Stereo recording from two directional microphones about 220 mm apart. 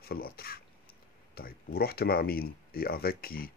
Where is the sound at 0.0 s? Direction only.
45° left (ahead or behind).